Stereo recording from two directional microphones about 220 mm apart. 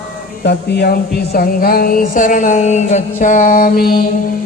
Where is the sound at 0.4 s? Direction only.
50° left (ahead or behind).